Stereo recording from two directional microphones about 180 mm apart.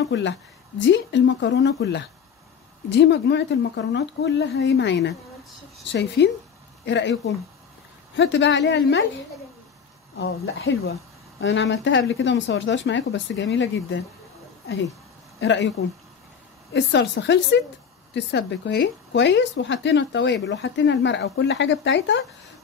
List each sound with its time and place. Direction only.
0.0 s speech: 85° left
8.2 s speech: 80° left
10.1 s speech: 90° left
15.4 s speech: 80° left
16.7 s speech: 75° left (ahead or behind)